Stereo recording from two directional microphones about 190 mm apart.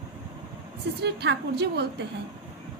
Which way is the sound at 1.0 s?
60° right (ahead or behind).